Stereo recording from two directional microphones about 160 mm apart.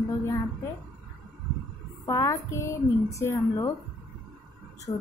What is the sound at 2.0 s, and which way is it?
A woman's voice, 20° left (ahead or behind).